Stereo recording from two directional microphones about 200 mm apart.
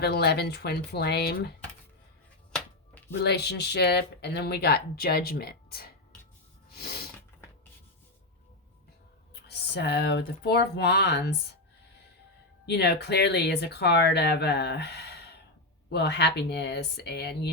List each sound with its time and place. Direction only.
0.0 s speech: 55° left (ahead or behind)
3.2 s speech: 55° left (ahead or behind)
6.7 s sneeze: 50° left (ahead or behind)
9.3 s speech: 55° left (ahead or behind)
12.6 s speech: 55° left (ahead or behind)